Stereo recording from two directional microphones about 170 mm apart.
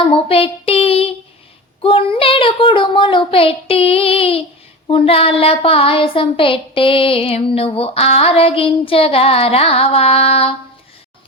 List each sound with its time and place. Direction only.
0.0 s child singing: 30° left (ahead or behind)
1.8 s a woman's voice: 30° left (ahead or behind)